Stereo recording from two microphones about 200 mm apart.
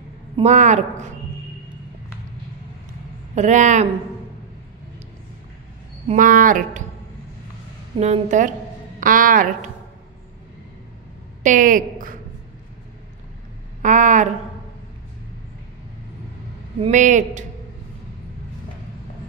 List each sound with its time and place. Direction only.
0.4 s a woman's voice: 35° right (ahead or behind)
3.3 s a woman's voice: 35° right (ahead or behind)
6.0 s a woman's voice: 40° right (ahead or behind)
8.0 s a woman's voice: 35° right (ahead or behind)
11.4 s a woman's voice: 40° right (ahead or behind)
13.8 s a woman's voice: 40° right (ahead or behind)
16.8 s a woman's voice: 40° right (ahead or behind)